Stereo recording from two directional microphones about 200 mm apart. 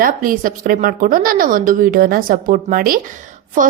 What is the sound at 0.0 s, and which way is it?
A woman's voice, 45° right (ahead or behind).